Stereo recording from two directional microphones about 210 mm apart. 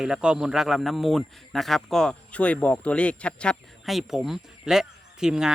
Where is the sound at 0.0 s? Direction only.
5° right (ahead or behind).